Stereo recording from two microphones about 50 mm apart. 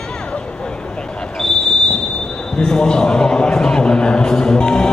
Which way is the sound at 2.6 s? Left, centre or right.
Centre.